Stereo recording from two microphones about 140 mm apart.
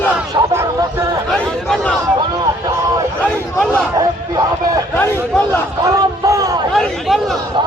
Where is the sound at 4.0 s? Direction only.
25° right (ahead or behind).